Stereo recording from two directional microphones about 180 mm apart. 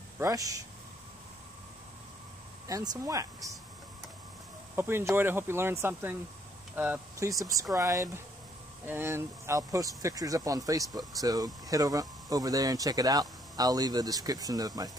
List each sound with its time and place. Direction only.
0.2 s speech: 20° right (ahead or behind)
2.7 s speech: 20° right (ahead or behind)
4.7 s speech: 10° right (ahead or behind)